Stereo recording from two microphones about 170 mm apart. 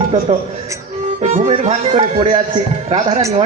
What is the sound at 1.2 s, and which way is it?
A man's voice, 50° right (ahead or behind).